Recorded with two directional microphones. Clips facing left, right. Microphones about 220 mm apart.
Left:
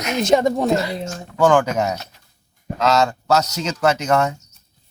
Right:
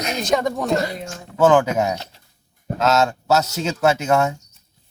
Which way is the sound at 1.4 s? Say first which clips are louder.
Right 1 dB; 5° right (ahead or behind).